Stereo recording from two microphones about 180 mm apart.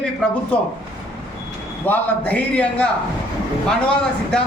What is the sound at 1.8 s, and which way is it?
A man's voice, 10° left (ahead or behind).